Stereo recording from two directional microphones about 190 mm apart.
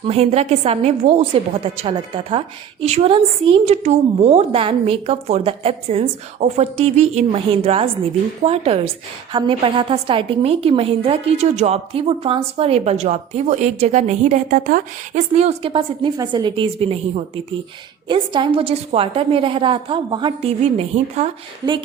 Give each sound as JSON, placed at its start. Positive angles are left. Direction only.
{"t": 0.0, "sound": "a woman's voice", "side_deg": -30}